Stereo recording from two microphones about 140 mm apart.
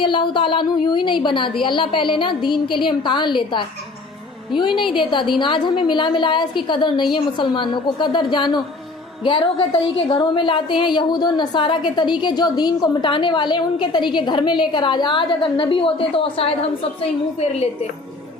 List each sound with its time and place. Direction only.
0.0 s a woman's voice: 35° left (ahead or behind)